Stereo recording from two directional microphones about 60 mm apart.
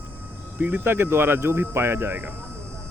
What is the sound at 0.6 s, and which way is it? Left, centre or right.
Speech, right.